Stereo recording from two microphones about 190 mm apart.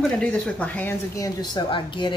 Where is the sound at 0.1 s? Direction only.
5° left (ahead or behind).